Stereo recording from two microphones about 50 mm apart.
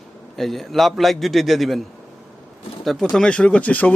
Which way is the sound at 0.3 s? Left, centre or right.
Centre.